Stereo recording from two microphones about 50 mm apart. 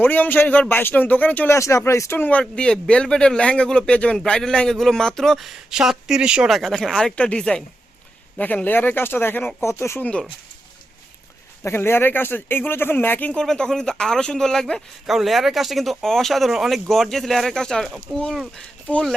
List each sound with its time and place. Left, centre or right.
0.0 s speech: left
1.5 s speech: left
2.0 s speech: left
2.4 s speech: centre
6.5 s speech: centre
7.2 s speech: left
8.4 s speech: left
9.6 s speech: left
11.6 s speech: left
13.3 s speech: centre
15.0 s speech: centre